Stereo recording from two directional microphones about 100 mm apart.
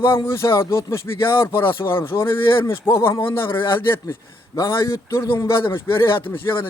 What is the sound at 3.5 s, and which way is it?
Speech, 55° left (ahead or behind).